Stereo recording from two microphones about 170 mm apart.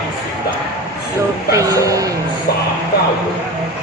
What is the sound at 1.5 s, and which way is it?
Speech, 20° right (ahead or behind).